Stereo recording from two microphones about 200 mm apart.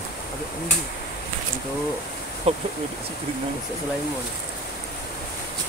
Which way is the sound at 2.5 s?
30° right (ahead or behind).